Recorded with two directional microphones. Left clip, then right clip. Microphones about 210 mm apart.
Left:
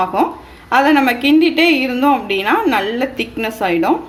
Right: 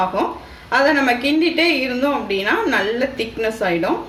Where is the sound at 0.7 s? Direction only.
45° left (ahead or behind).